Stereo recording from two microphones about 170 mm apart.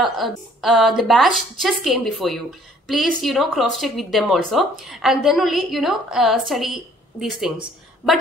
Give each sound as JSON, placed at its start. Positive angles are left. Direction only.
{"t": 0.0, "sound": "speech", "side_deg": 0}